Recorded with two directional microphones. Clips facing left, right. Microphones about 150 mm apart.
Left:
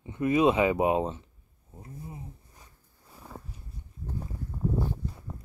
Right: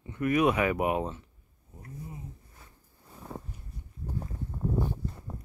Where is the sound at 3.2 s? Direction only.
5° left (ahead or behind).